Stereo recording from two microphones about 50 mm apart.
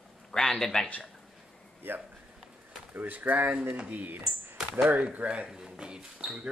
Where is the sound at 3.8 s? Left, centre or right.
Right.